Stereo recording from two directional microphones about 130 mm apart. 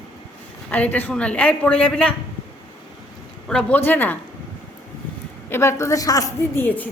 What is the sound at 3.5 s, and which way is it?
Speech, 10° left (ahead or behind).